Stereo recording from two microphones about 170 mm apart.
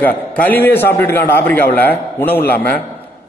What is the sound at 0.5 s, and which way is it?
A man's voice, 10° left (ahead or behind).